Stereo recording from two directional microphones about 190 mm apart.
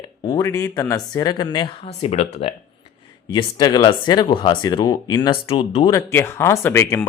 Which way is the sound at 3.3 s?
25° left (ahead or behind).